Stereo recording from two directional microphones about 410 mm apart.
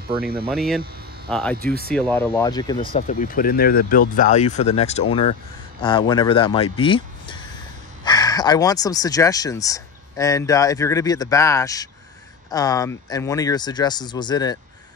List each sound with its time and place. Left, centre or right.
0.1 s speech: right
0.5 s speech: centre
1.6 s speech: right
2.0 s speech: centre